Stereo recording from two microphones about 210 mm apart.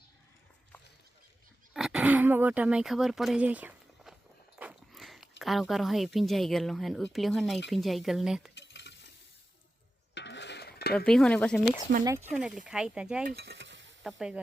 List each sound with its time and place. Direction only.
1.7 s speech: centre (ahead or behind)
4.5 s a sound: 5° right (ahead or behind)
5.4 s speech: centre (ahead or behind)
8.5 s stir: 55° left (ahead or behind)
10.2 s cutlery: 55° left (ahead or behind)
10.9 s speech: 5° left (ahead or behind)
12.0 s speech: 10° right (ahead or behind)
13.2 s cutlery: 50° right (ahead or behind)
14.0 s speech: centre (ahead or behind)